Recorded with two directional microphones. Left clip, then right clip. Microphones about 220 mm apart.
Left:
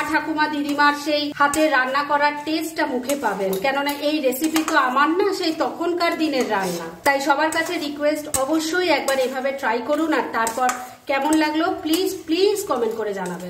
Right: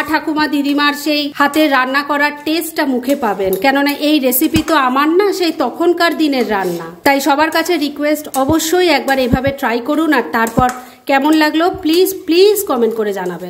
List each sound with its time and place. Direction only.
0.1 s a woman's voice: 50° right (ahead or behind)